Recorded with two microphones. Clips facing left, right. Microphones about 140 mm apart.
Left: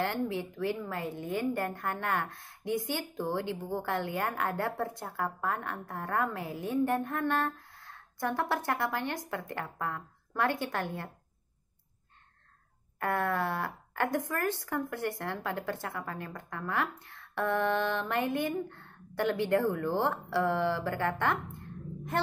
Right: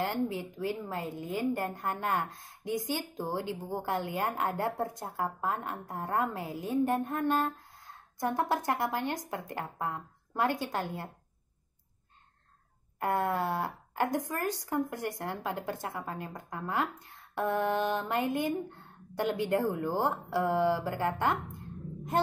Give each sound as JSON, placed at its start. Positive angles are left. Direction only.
{"t": 0.0, "sound": "a woman's voice", "side_deg": -15}
{"t": 1.0, "sound": "a woman's voice", "side_deg": 20}
{"t": 1.4, "sound": "a woman's voice", "side_deg": -15}
{"t": 13.0, "sound": "a woman's voice", "side_deg": -15}